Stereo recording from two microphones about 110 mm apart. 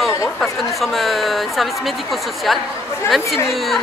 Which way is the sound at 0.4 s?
Centre (ahead or behind).